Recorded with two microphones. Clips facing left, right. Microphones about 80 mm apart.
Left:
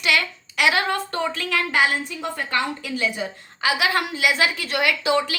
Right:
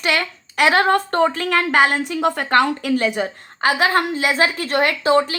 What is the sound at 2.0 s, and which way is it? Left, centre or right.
A woman's voice, right.